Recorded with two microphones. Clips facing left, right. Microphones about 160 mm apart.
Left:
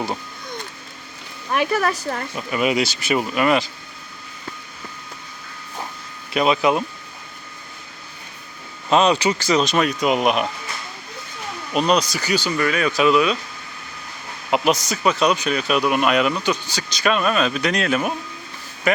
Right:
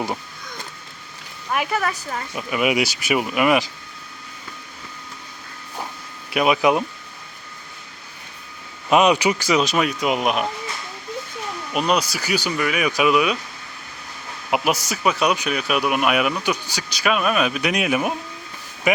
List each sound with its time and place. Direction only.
1.7 s speech: 45° left (ahead or behind)
2.3 s speech: 10° right (ahead or behind)
6.3 s speech: 10° right (ahead or behind)
8.9 s speech: 10° right (ahead or behind)
11.7 s speech: 5° right (ahead or behind)
14.5 s speech: 10° right (ahead or behind)